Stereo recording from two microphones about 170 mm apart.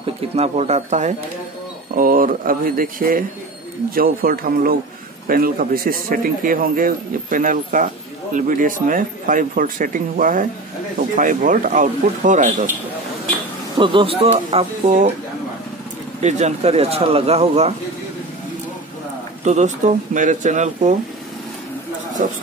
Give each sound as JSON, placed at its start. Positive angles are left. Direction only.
{"t": 0.0, "sound": "speech", "side_deg": -40}
{"t": 2.0, "sound": "speech", "side_deg": -55}
{"t": 13.7, "sound": "speech", "side_deg": -30}
{"t": 16.2, "sound": "speech", "side_deg": -40}
{"t": 19.4, "sound": "speech", "side_deg": -45}